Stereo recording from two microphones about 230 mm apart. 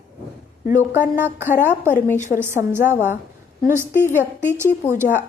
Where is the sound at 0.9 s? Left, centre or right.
Centre.